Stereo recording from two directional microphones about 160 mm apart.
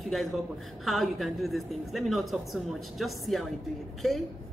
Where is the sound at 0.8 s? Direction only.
Centre (ahead or behind).